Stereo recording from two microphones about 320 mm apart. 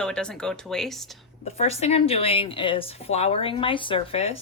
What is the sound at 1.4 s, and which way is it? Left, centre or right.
A woman's voice, centre.